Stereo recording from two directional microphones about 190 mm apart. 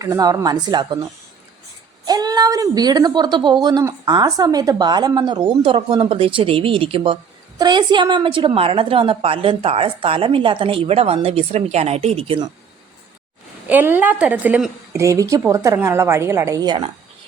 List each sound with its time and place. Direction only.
0.0 s a woman's voice: 20° right (ahead or behind)
2.0 s a woman's voice: 20° right (ahead or behind)
13.7 s a woman's voice: 10° right (ahead or behind)